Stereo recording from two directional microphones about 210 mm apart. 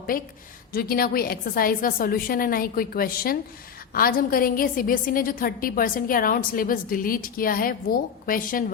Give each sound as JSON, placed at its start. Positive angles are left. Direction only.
{"t": 0.1, "sound": "a woman's voice", "side_deg": 45}